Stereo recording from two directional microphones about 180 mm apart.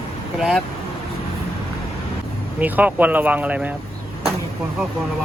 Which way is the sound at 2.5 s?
10° right (ahead or behind).